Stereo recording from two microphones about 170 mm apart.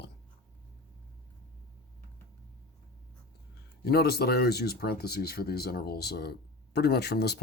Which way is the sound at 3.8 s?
65° left (ahead or behind).